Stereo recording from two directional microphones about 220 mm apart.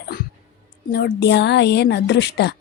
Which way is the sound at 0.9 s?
45° left (ahead or behind).